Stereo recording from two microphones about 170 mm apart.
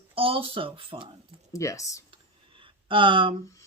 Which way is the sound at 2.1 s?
30° right (ahead or behind).